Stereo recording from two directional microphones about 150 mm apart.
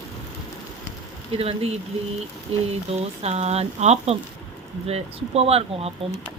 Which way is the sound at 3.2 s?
45° right (ahead or behind).